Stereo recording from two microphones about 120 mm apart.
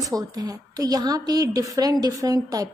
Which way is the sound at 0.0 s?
30° right (ahead or behind).